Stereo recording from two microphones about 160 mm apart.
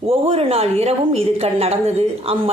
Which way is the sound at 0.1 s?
40° right (ahead or behind).